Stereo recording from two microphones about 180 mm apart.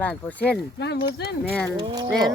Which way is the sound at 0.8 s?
65° left (ahead or behind).